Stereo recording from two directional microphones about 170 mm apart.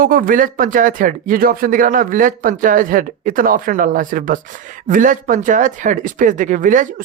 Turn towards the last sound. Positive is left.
turn(degrees=-50)  # may be behind; listen again after turning